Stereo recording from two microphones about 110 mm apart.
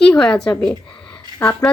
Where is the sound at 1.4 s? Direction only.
20° left (ahead or behind).